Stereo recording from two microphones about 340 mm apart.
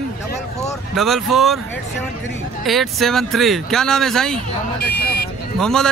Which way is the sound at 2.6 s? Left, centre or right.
Centre.